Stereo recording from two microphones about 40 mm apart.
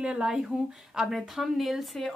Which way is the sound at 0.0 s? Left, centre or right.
Centre.